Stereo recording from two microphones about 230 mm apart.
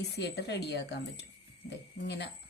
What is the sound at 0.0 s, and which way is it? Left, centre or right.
Speech, left.